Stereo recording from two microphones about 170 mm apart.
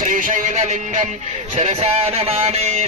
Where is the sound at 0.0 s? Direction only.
50° right (ahead or behind).